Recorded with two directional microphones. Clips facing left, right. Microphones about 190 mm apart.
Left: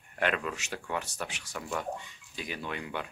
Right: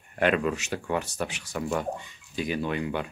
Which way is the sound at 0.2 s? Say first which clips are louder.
Right 7 dB; 10° right (ahead or behind).